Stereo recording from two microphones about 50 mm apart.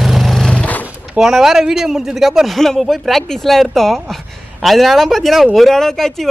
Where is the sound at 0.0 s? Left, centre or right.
Centre.